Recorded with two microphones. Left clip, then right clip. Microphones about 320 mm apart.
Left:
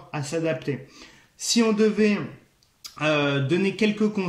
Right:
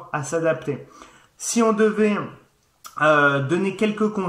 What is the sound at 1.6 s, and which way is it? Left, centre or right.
Speech, right.